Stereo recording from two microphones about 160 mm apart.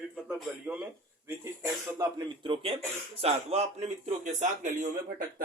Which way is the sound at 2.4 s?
35° right (ahead or behind).